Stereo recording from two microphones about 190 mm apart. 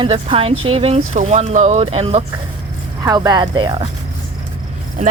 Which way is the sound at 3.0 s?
20° right (ahead or behind).